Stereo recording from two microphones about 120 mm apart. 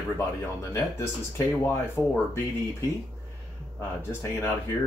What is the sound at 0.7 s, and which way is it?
Speech, 20° left (ahead or behind).